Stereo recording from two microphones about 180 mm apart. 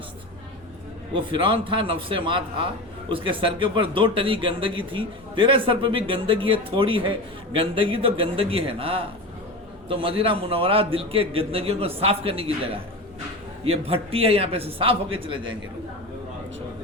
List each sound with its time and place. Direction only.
1.1 s a man's voice: 30° right (ahead or behind)